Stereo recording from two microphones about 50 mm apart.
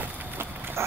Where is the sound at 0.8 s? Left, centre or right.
Right.